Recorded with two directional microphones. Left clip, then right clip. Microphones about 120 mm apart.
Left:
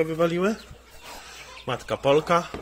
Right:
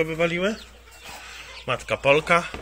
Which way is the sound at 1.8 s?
30° left (ahead or behind).